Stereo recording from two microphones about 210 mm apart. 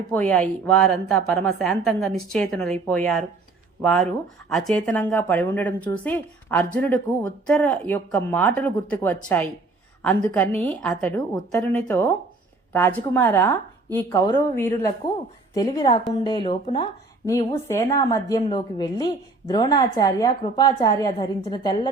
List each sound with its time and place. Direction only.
0.1 s a woman's voice: 5° left (ahead or behind); by 16.9 s 25° left (ahead or behind)
17.2 s a woman's voice: 15° left (ahead or behind)